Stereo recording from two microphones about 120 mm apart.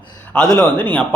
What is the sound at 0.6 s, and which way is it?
Speech, 10° left (ahead or behind).